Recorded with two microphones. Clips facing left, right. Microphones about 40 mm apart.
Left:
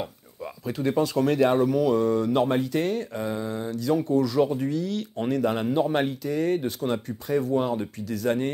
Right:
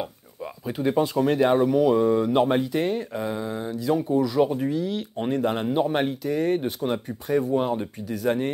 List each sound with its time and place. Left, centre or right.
0.0 s speech: centre